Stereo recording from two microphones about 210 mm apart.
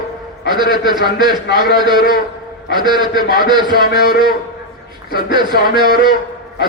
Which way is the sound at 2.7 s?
20° right (ahead or behind).